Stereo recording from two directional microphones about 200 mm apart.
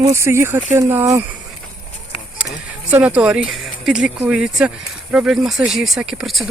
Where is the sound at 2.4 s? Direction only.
5° right (ahead or behind).